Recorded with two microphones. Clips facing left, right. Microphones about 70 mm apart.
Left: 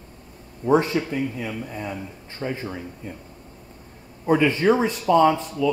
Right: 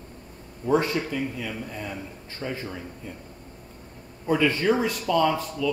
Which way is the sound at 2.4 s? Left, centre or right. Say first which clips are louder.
Left 4 dB; centre.